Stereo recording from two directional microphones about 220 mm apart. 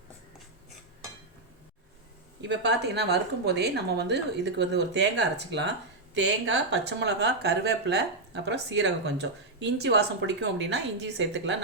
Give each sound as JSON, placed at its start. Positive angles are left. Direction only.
{"t": 2.4, "sound": "speech", "side_deg": -50}